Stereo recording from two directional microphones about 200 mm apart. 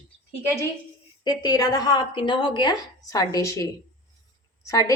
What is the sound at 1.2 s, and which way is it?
A woman's voice, 20° left (ahead or behind).